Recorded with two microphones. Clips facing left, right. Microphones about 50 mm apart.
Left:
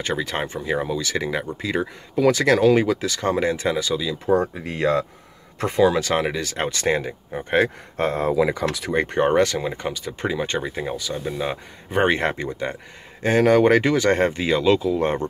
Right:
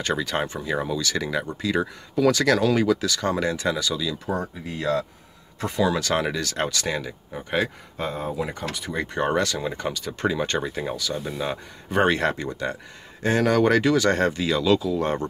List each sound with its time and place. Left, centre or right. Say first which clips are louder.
0.0 s speech: even; left
4.6 s speech: left 4 dB; left; by 6.5 s centre
6.5 s speech: left 4 dB; left
7.5 s speech: left 5 dB; left
8.9 s speech: left 6 dB; left
9.2 s speech: left 4 dB; left
9.6 s speech: left 1 dB; centre